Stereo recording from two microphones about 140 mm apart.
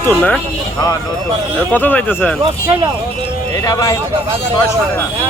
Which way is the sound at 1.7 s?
10° left (ahead or behind).